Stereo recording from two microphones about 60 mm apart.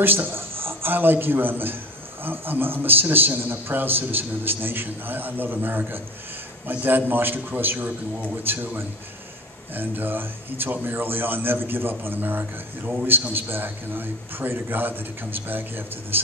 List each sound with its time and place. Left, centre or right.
0.0 s a man's voice: right
9.8 s a man's voice: right